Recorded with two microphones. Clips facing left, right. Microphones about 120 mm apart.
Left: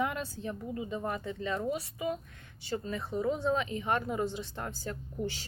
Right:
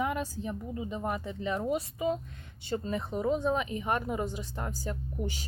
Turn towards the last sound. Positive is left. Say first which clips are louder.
# even
turn(degrees=-15)  # may be behind; listen again after turning